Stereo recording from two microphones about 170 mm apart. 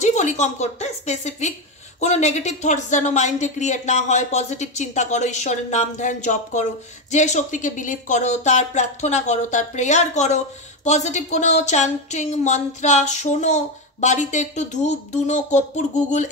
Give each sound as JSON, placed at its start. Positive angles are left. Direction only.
{"t": 0.0, "sound": "a woman's voice", "side_deg": 45}